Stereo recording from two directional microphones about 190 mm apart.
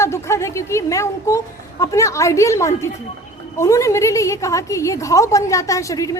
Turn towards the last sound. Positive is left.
turn(degrees=20)  # may be behind; listen again after turning